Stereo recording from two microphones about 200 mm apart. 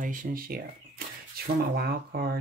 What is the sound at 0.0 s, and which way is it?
Speech, 40° right (ahead or behind).